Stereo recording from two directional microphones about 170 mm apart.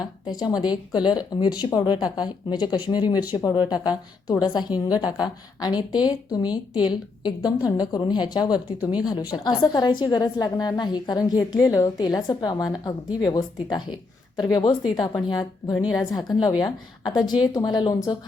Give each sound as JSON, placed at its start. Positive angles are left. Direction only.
{"t": 0.0, "sound": "a woman's voice", "side_deg": 25}
{"t": 8.8, "sound": "a woman's voice", "side_deg": -10}
{"t": 9.3, "sound": "a woman's voice", "side_deg": 25}